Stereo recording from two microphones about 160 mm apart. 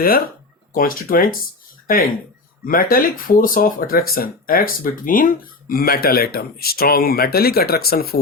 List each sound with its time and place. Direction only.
0.0 s speech: 65° left (ahead or behind)